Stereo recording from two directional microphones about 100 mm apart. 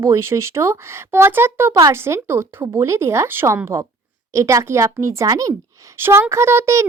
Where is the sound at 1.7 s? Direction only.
35° right (ahead or behind).